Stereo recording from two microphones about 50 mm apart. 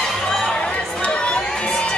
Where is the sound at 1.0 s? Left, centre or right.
Left.